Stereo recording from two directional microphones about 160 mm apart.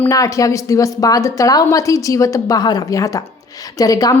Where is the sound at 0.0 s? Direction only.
20° left (ahead or behind).